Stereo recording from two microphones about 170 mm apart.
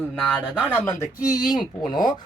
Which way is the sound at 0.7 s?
15° left (ahead or behind).